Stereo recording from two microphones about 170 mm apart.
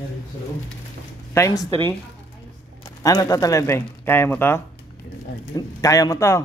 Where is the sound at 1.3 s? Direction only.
20° left (ahead or behind).